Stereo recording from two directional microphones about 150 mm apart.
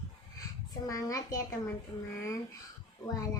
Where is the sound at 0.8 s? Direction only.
20° left (ahead or behind).